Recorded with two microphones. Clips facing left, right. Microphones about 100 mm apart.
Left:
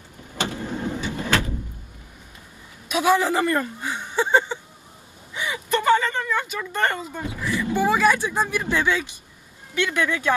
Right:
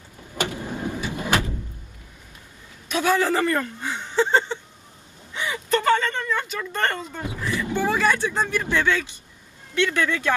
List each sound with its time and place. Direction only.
0.4 s vehicle: 15° right (ahead or behind)
2.9 s a sound: 15° left (ahead or behind)
5.3 s gasp: 15° left (ahead or behind)
7.5 s speech: 15° left (ahead or behind)